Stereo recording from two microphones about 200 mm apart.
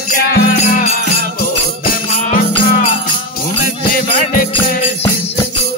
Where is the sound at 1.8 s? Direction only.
45° left (ahead or behind).